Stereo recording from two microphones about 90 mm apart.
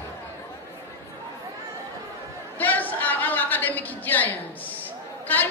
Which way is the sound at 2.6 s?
20° left (ahead or behind).